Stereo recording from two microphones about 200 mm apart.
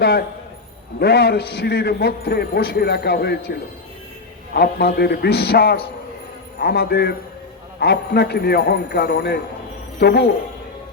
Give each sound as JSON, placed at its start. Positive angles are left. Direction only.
{"t": 0.0, "sound": "a man's voice", "side_deg": 50}